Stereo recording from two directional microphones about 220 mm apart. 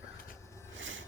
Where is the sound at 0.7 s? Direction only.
60° right (ahead or behind).